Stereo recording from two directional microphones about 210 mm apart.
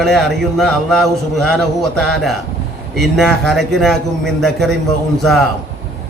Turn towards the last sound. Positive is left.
turn(degrees=0)  # may be behind; listen again after turning